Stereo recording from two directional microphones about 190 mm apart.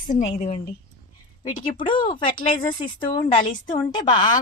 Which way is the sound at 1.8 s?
25° left (ahead or behind).